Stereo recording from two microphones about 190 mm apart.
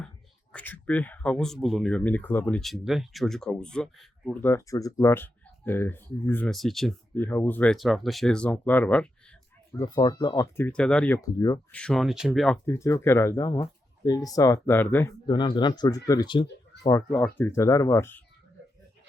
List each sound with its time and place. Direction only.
0.5 s speech: 10° left (ahead or behind)
4.4 s speech: 15° left (ahead or behind)
9.7 s speech: 20° left (ahead or behind)
10.7 s speech: 5° left (ahead or behind)
11.2 s speech: 20° left (ahead or behind)
11.7 s speech: 5° left (ahead or behind)
12.6 s speech: 15° left (ahead or behind)
15.3 s speech: 25° left (ahead or behind)
16.9 s speech: 10° left (ahead or behind)